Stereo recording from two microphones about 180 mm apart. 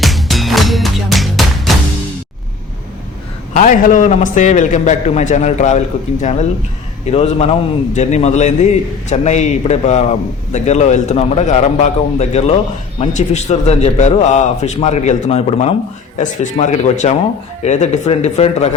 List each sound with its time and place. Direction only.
0.0 s music: centre (ahead or behind)
3.5 s a man's voice: 45° left (ahead or behind)